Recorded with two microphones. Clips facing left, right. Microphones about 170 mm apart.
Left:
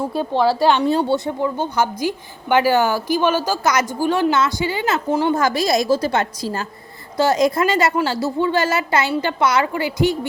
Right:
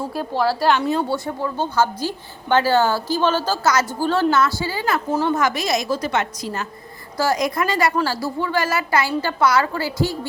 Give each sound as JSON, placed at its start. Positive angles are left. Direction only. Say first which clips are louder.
{"t": 0.2, "sound": "speech", "louder": "left 4 dB", "side_deg": 0}
{"t": 0.9, "sound": "a woman's voice", "louder": "left 3 dB", "side_deg": 30}
{"t": 1.1, "sound": "a woman's voice", "louder": "left 4 dB", "side_deg": 20}